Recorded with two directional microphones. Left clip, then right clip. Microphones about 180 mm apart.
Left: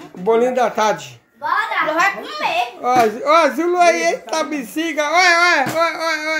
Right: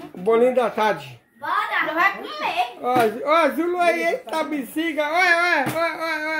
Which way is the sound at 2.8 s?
10° left (ahead or behind).